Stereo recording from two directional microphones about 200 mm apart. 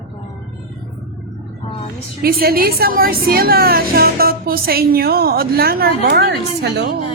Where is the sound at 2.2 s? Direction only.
50° right (ahead or behind).